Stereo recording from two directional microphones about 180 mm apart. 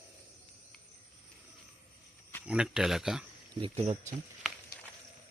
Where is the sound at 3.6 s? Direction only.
30° right (ahead or behind).